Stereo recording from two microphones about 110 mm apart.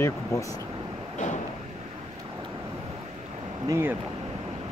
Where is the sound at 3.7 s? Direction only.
20° right (ahead or behind).